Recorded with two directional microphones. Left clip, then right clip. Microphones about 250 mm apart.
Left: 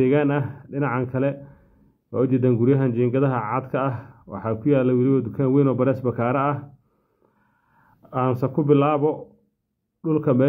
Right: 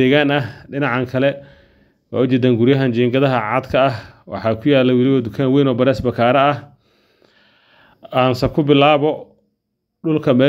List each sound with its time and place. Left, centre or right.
0.0 s speech: right
7.7 s a sound: right
8.4 s speech: right